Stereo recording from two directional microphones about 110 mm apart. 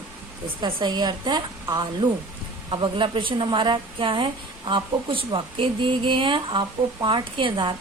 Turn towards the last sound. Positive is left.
turn(degrees=-45)  # may be behind; listen again after turning